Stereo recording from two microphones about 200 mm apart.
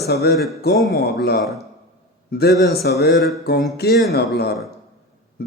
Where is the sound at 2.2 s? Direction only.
50° left (ahead or behind).